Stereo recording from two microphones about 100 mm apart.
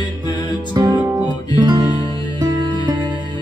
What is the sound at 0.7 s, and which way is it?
Music, 45° right (ahead or behind).